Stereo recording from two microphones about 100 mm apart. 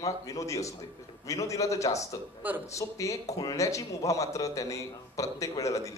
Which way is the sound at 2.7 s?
30° left (ahead or behind).